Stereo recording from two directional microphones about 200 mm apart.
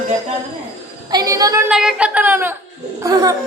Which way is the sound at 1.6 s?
5° right (ahead or behind).